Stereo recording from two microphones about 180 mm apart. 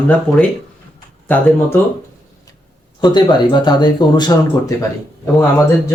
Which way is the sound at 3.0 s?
25° left (ahead or behind).